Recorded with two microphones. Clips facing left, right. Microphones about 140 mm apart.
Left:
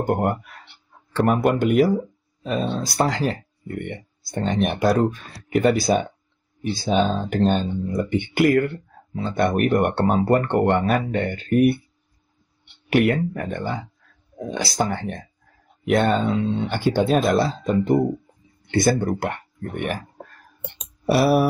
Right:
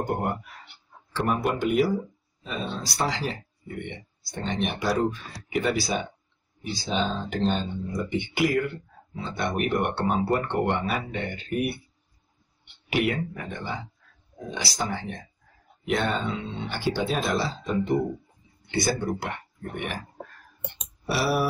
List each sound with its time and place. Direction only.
0.0 s speech: 55° left (ahead or behind)
12.9 s speech: 50° left (ahead or behind)
21.0 s speech: 50° left (ahead or behind)